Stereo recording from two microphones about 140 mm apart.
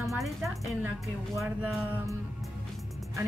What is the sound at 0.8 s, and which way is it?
Speech, 20° right (ahead or behind).